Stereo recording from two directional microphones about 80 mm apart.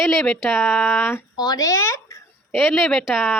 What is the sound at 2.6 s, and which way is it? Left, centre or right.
Speech, centre.